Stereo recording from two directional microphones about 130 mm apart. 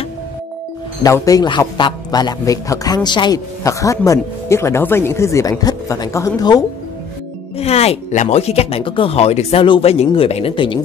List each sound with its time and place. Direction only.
1.0 s a man's voice: 25° left (ahead or behind)
7.5 s speech: 55° left (ahead or behind)